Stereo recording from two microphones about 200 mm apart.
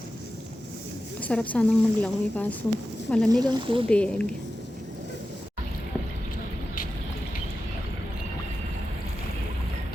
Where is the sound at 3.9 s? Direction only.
5° left (ahead or behind).